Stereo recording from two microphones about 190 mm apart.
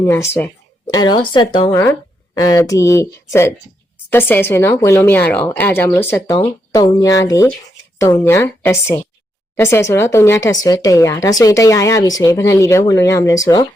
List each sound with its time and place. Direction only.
0.0 s speech: 15° left (ahead or behind)